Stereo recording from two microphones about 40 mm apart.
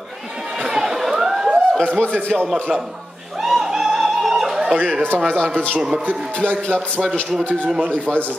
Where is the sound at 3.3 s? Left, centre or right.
Centre.